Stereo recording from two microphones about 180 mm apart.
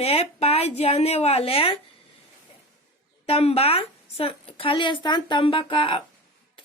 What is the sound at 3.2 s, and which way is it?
A woman's voice, 35° left (ahead or behind).